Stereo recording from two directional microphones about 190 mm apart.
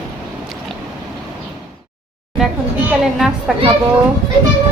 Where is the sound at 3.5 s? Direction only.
5° right (ahead or behind).